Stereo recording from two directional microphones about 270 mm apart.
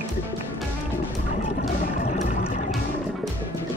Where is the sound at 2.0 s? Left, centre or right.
Left.